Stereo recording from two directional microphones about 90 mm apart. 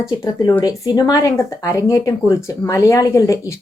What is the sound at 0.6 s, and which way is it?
Speech, 45° left (ahead or behind).